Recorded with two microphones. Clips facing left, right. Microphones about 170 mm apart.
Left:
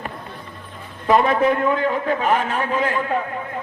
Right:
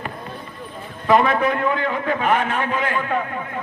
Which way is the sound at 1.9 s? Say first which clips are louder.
Left 1 dB; 35° left (ahead or behind).